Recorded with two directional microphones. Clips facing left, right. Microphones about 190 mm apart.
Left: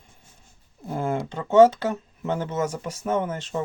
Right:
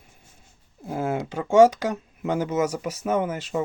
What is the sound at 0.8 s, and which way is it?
Speech, 5° right (ahead or behind).